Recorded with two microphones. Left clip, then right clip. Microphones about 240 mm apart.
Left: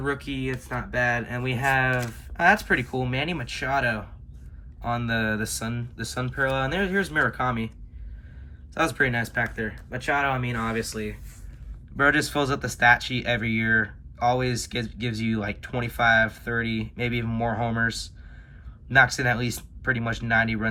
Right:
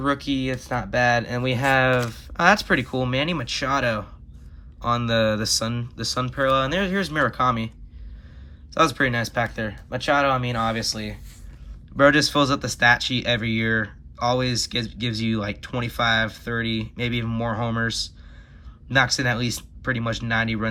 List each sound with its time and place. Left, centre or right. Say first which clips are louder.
0.0 s speech: right 5 dB; centre
0.8 s speech: right 5 dB; right
1.9 s speech: right 5 dB; centre
8.7 s speech: right 3 dB; centre
10.1 s speech: right 4 dB; right
10.3 s speech: right 4 dB; centre